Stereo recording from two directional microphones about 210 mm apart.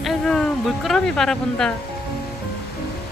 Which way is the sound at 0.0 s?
Centre (ahead or behind).